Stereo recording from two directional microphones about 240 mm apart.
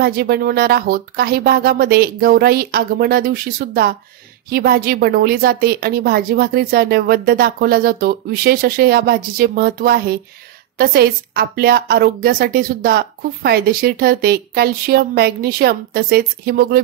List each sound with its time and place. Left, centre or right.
0.0 s a woman's voice: right